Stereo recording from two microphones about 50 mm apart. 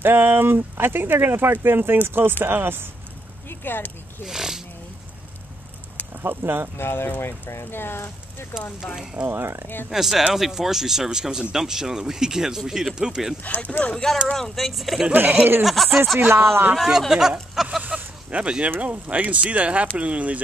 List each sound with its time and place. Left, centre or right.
0.0 s speech: right
3.4 s speech: left
4.3 s speech: centre
6.2 s speech: right
6.8 s speech: left
8.8 s speech: centre
13.4 s speech: left
14.3 s speech: centre
15.1 s speech: right
15.6 s speech: centre
16.2 s speech: right
16.7 s speech: centre
17.8 s a sound: right
18.8 s speech: right